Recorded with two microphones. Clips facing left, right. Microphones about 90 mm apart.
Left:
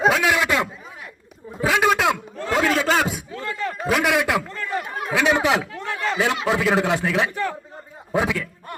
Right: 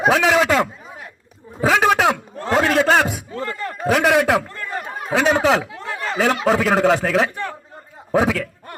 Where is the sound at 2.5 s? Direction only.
50° right (ahead or behind).